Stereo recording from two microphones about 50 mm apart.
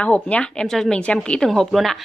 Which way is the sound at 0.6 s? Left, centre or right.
Centre.